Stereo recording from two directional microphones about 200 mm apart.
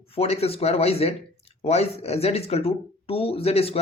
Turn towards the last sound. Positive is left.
turn(degrees=30)  # may be behind; listen again after turning